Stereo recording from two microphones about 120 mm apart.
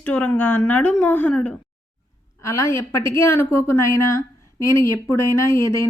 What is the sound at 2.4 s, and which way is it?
A woman's voice, 25° left (ahead or behind).